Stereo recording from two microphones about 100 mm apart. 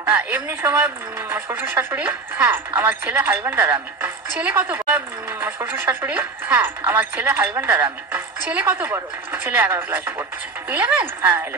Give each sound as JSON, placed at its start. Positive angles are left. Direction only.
{"t": 0.1, "sound": "a woman's voice", "side_deg": -20}